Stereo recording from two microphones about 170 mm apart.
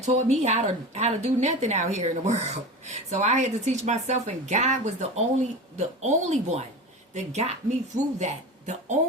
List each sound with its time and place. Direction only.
0.0 s speech: 40° right (ahead or behind)